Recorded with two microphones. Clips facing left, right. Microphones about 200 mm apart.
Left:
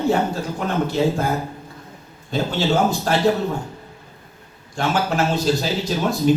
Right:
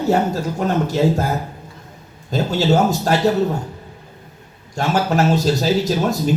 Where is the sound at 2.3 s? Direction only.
40° right (ahead or behind).